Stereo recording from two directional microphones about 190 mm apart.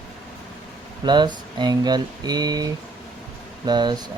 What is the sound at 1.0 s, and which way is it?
Speech, 25° right (ahead or behind).